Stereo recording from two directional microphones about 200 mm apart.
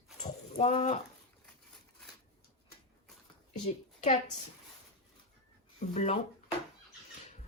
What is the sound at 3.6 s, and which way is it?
Speech, 30° left (ahead or behind).